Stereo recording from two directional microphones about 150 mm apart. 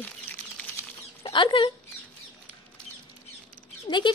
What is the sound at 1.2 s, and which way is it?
Speech, 35° left (ahead or behind).